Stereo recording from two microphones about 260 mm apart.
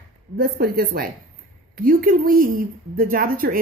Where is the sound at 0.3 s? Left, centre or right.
Right.